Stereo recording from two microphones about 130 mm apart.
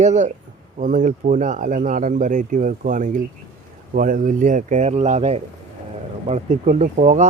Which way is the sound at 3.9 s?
90° right.